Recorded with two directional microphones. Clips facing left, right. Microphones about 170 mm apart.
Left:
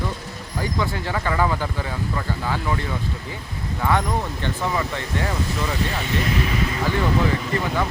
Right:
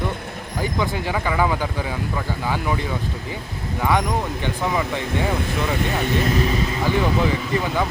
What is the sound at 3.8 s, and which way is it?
Speech, 10° right (ahead or behind).